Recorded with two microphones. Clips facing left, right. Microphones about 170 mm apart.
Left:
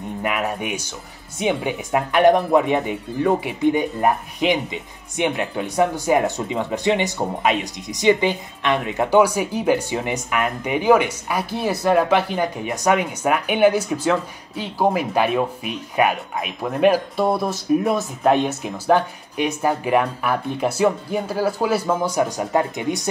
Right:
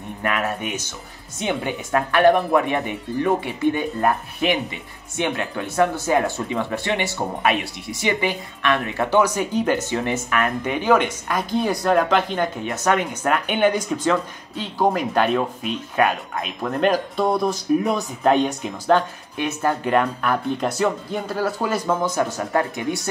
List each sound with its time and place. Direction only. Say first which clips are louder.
0.2 s speech: even; 15° left (ahead or behind)